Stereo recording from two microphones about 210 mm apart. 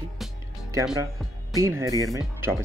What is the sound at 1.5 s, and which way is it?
Speech, 15° right (ahead or behind).